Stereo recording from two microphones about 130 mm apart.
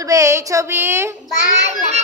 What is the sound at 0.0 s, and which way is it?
A woman's voice, 25° right (ahead or behind).